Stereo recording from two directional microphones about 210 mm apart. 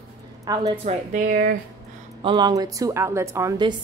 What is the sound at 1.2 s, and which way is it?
Speech, 50° right (ahead or behind).